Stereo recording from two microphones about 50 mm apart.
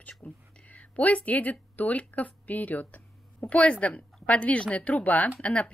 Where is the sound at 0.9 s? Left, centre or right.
Left.